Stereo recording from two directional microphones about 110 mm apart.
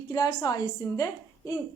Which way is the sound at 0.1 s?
40° left (ahead or behind).